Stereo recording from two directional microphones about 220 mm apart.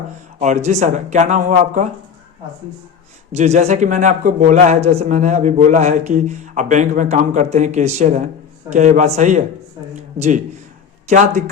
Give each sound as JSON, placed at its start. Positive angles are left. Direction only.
{"t": 0.3, "sound": "a man's voice", "side_deg": -30}
{"t": 3.3, "sound": "a man's voice", "side_deg": -30}